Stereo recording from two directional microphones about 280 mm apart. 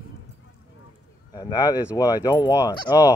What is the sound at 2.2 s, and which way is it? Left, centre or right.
Fowl, centre.